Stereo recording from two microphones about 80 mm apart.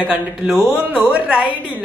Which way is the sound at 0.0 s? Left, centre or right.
Centre.